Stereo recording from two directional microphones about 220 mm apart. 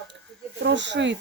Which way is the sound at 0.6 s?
55° right (ahead or behind).